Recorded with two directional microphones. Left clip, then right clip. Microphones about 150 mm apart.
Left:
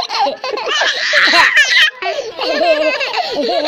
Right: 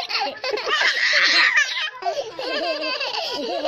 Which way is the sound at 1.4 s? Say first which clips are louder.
Left 8 dB; 10° right (ahead or behind).